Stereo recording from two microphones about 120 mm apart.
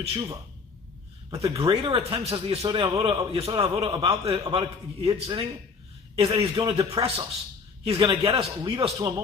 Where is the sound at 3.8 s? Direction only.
45° right (ahead or behind).